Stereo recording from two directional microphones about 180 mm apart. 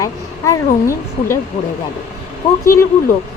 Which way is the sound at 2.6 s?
15° left (ahead or behind).